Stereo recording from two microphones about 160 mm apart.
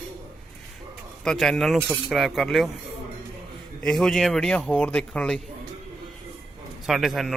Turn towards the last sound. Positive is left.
turn(degrees=0)  # may be behind; listen again after turning